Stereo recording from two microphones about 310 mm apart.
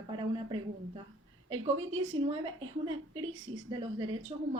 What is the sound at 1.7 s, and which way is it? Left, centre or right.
A woman's voice, right.